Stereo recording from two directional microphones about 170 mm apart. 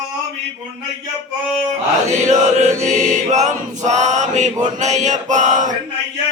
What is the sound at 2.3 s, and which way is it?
Mantra, 45° right (ahead or behind).